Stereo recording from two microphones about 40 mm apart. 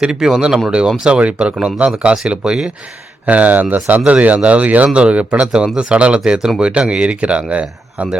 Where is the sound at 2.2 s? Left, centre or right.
Centre.